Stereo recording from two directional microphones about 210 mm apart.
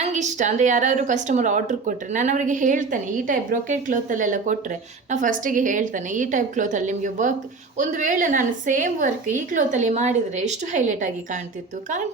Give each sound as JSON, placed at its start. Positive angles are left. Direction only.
{"t": 0.0, "sound": "a woman's voice", "side_deg": -35}